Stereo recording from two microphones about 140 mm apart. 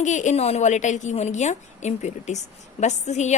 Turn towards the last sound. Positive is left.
turn(degrees=55)  # may be behind; listen again after turning